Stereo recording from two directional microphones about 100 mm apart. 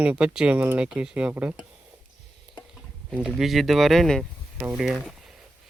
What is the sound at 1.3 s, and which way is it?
Speech, 25° right (ahead or behind).